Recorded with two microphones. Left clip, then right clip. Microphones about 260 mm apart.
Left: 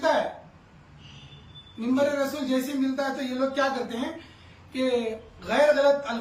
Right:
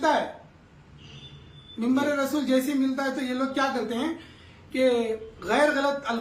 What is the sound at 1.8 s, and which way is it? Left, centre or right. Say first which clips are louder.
A woman's voice: left 1 dB; centre.